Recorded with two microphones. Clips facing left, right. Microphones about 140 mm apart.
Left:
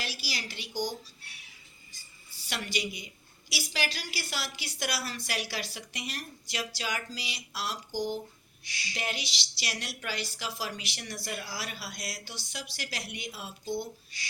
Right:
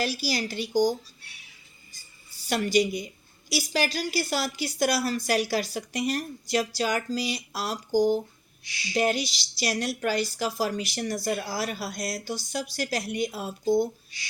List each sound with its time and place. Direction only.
0.0 s a woman's voice: 45° right (ahead or behind)
1.9 s music: 45° right (ahead or behind)
3.5 s a woman's voice: 40° right (ahead or behind)